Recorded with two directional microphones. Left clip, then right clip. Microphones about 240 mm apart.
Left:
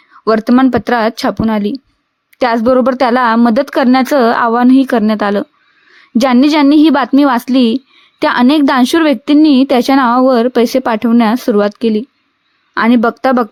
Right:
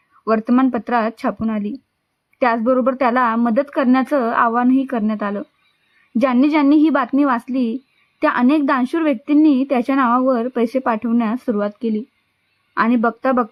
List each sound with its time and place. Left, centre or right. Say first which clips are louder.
0.3 s a woman's voice: left 7 dB; left